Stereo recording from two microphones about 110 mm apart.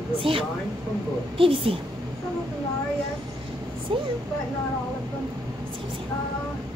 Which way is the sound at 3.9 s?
50° right (ahead or behind).